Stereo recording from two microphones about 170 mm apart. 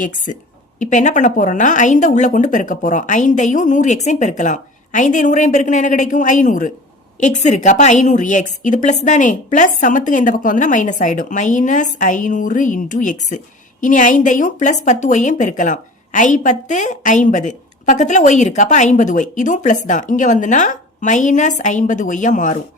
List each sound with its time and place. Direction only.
0.8 s speech: 45° left (ahead or behind)